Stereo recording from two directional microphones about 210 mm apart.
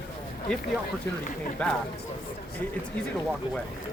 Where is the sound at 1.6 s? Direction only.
5° left (ahead or behind).